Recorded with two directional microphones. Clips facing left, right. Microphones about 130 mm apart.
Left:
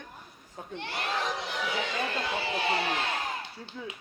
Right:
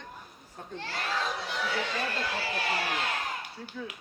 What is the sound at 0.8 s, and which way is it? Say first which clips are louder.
Speech: left 1 dB; 20° left (ahead or behind).